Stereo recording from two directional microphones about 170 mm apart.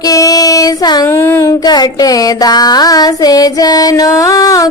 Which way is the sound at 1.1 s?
15° left (ahead or behind).